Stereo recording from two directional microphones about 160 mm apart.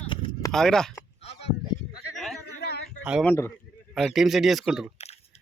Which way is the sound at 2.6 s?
80° left.